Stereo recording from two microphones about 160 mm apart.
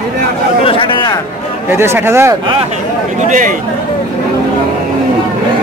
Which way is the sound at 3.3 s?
55° right (ahead or behind).